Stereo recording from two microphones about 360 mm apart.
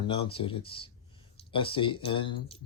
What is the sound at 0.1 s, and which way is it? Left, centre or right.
Speech, centre.